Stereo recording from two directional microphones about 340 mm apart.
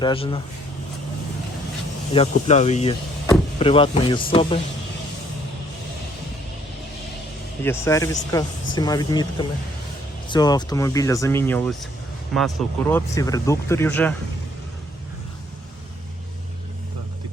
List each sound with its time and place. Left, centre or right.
0.0 s speech: centre
2.1 s speech: centre
7.6 s speech: centre